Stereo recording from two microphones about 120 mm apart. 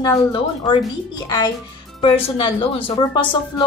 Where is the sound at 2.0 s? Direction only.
50° left (ahead or behind).